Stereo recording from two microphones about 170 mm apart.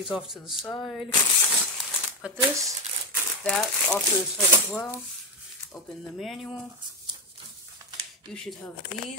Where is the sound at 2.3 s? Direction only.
5° right (ahead or behind).